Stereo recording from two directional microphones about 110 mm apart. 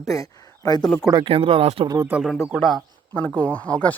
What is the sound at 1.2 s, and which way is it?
Speech, 60° right (ahead or behind).